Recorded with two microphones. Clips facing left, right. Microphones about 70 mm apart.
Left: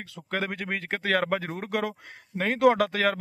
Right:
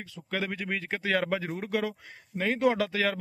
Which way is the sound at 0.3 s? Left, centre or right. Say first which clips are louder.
Left 2 dB; left.